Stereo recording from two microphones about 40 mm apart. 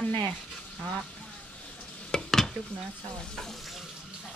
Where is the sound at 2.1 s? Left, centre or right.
Centre.